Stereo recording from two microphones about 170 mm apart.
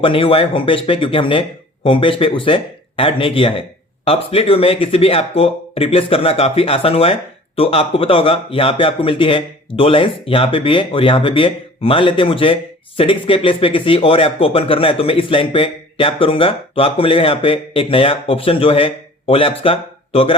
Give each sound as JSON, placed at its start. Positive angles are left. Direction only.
{"t": 0.0, "sound": "speech", "side_deg": 30}